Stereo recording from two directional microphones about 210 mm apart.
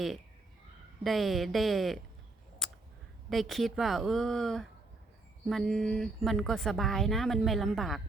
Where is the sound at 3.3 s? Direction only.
Centre (ahead or behind).